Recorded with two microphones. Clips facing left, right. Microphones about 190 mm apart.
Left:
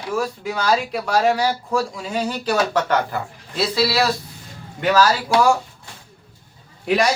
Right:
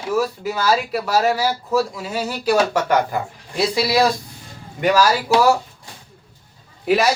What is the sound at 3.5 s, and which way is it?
Speech, 15° right (ahead or behind).